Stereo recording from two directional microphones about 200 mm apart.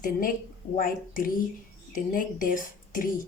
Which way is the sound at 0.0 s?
45° left (ahead or behind).